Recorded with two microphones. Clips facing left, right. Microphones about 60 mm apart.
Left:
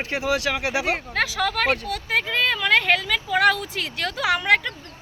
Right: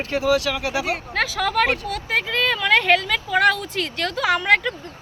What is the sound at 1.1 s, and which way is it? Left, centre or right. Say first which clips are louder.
Speech: right 5 dB; centre.